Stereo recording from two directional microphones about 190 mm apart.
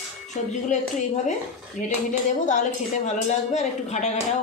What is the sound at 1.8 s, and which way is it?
A woman's voice, 40° left (ahead or behind).